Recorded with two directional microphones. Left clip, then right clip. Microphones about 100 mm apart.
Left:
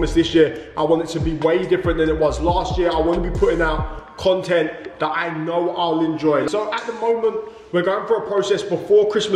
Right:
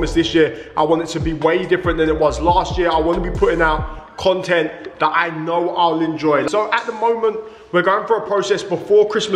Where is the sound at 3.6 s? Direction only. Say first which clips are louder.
Right 4 dB; 15° right (ahead or behind).